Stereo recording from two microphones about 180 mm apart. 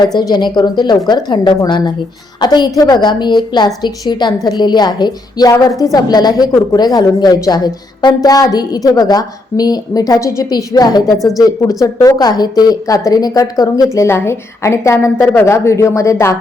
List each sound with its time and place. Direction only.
0.0 s a woman's voice: 25° left (ahead or behind)